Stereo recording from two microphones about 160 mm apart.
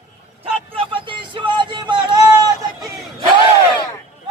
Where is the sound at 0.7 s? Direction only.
30° right (ahead or behind).